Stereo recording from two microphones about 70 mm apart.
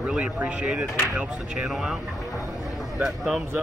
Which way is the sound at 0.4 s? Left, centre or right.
Centre.